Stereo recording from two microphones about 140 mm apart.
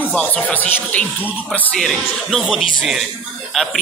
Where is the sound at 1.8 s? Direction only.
Centre (ahead or behind).